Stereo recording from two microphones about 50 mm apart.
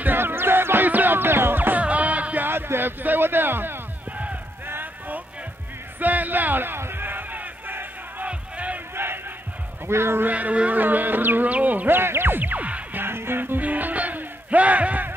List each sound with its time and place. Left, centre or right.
0.0 s music: right
1.8 s music: right
2.4 s music: right
5.9 s battle cry: right
8.3 s crowd: right
8.9 s battle cry: right
9.8 s speech: right
10.2 s insect: right
11.5 s speech: right
12.0 s music: right
13.0 s music: right
13.6 s music: right